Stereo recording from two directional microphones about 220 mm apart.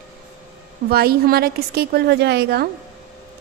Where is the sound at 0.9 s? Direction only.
45° right (ahead or behind).